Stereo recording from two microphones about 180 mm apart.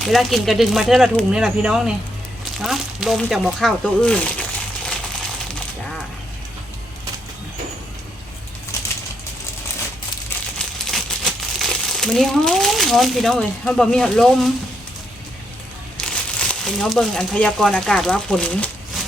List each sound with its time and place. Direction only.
0.0 s speech: centre (ahead or behind)
8.7 s bird: 15° left (ahead or behind)
10.2 s crumpling: 5° left (ahead or behind)
16.0 s speech: 5° left (ahead or behind)